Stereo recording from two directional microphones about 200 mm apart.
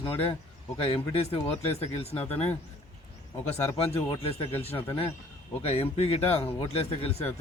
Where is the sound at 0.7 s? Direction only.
30° left (ahead or behind).